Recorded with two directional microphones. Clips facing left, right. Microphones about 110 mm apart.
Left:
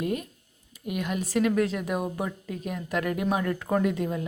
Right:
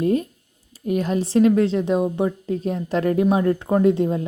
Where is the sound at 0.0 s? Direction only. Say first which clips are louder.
Right 9 dB; 30° right (ahead or behind).